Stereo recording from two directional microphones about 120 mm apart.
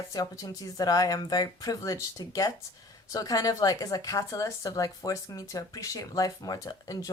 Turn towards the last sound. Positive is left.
turn(degrees=30)  # may be behind; listen again after turning